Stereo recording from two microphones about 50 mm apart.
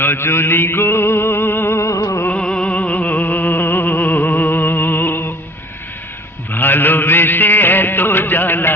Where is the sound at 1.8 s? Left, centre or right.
Left.